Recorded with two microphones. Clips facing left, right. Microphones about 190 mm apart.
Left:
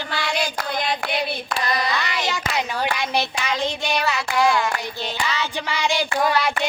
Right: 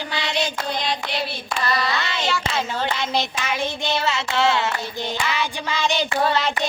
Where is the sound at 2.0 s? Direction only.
25° right (ahead or behind).